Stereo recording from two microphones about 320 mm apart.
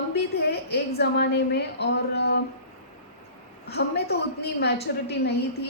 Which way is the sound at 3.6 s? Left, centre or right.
Left.